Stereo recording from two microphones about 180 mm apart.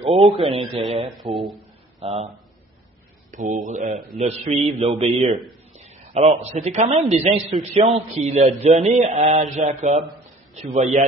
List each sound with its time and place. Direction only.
0.3 s speech: 30° right (ahead or behind)
1.1 s speech: centre (ahead or behind)
2.0 s speech: 25° right (ahead or behind)
3.3 s a man's voice: 45° right (ahead or behind)